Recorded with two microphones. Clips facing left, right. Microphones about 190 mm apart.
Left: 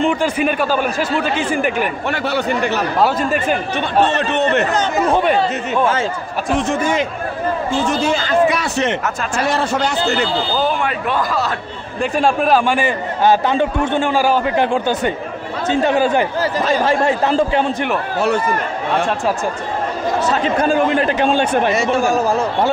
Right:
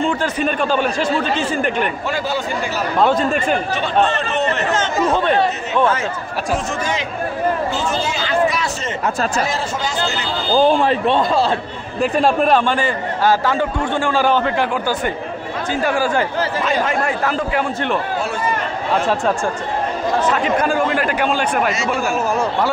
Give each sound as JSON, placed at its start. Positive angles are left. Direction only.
{"t": 0.0, "sound": "speech", "side_deg": 15}
{"t": 2.0, "sound": "speech", "side_deg": 65}
{"t": 3.0, "sound": "a man's voice", "side_deg": 5}
{"t": 3.7, "sound": "speech", "side_deg": 60}
{"t": 6.8, "sound": "speech", "side_deg": 50}
{"t": 9.5, "sound": "speech", "side_deg": 65}
{"t": 10.6, "sound": "a man's voice", "side_deg": -30}
{"t": 12.0, "sound": "a man's voice", "side_deg": 0}
{"t": 12.7, "sound": "a man's voice", "side_deg": 15}
{"t": 14.2, "sound": "speech", "side_deg": 10}
{"t": 14.6, "sound": "a man's voice", "side_deg": 20}
{"t": 16.3, "sound": "a man's voice", "side_deg": 35}
{"t": 20.2, "sound": "a man's voice", "side_deg": 25}